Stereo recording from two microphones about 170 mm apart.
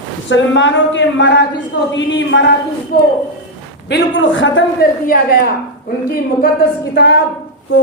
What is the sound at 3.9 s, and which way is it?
A man's voice, 90° left.